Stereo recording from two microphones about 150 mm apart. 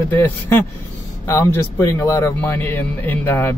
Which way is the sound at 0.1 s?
15° left (ahead or behind).